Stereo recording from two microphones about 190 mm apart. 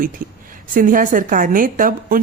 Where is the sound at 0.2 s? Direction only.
45° right (ahead or behind).